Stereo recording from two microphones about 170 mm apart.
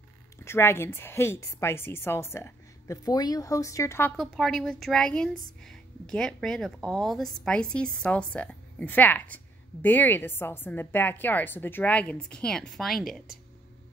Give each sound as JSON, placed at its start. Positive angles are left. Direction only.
{"t": 0.5, "sound": "a woman's voice", "side_deg": 15}
{"t": 4.2, "sound": "a woman's voice", "side_deg": 0}